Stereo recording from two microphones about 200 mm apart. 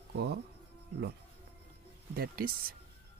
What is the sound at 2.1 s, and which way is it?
Speech, 45° right (ahead or behind).